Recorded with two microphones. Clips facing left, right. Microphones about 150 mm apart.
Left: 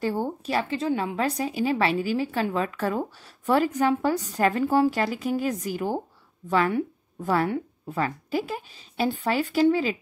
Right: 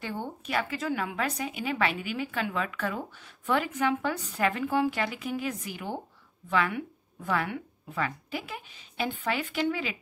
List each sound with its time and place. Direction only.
0.0 s speech: 35° left (ahead or behind)